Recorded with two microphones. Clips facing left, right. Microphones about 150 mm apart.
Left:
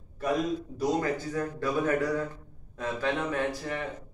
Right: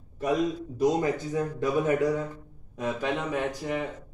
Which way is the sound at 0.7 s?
20° right (ahead or behind).